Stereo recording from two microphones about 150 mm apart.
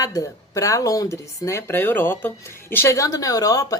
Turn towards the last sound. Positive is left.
turn(degrees=25)  # may be behind; listen again after turning